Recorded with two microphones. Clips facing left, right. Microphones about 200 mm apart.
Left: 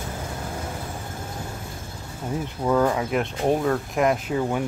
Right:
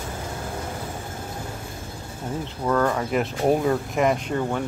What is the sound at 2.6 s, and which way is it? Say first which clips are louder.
Speech: left 1 dB; 10° left (ahead or behind).